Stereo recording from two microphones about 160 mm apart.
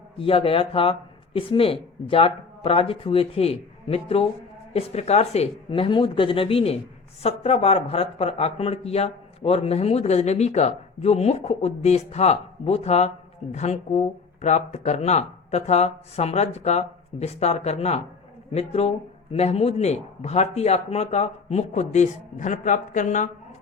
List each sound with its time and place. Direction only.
0.2 s a man's voice: 35° left (ahead or behind)